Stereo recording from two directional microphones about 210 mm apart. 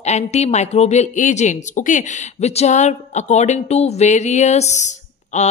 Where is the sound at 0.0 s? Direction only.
30° left (ahead or behind).